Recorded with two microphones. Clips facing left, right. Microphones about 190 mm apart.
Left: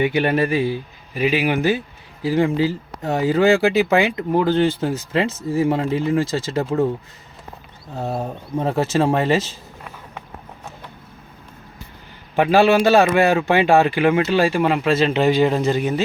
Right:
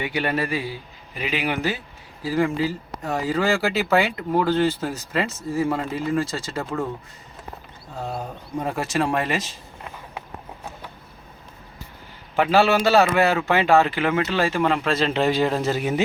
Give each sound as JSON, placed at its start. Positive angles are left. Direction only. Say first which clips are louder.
{"t": 0.0, "sound": "speech", "louder": "left 6 dB", "side_deg": 20}
{"t": 7.9, "sound": "speech", "louder": "left 5 dB", "side_deg": 25}
{"t": 12.4, "sound": "a man's voice", "louder": "left 4 dB", "side_deg": 15}